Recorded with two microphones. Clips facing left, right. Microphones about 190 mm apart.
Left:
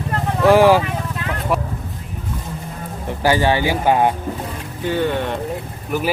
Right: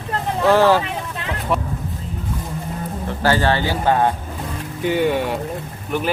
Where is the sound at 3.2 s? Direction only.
15° left (ahead or behind).